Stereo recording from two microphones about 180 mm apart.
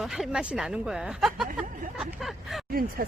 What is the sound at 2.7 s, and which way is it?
Speech, 55° right (ahead or behind).